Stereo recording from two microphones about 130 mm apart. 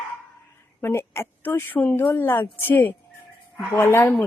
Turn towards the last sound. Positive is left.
turn(degrees=15)  # may be behind; listen again after turning